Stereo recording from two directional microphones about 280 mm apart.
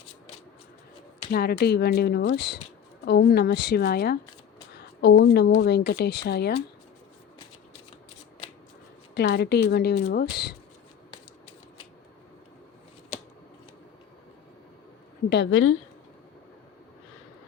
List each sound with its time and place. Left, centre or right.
1.3 s speech: left
4.7 s a sound: left
5.5 s speech: left
9.1 s speech: left
13.1 s scissors: left
15.3 s speech: left